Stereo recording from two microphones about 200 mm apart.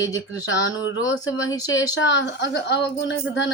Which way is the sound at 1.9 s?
65° left (ahead or behind).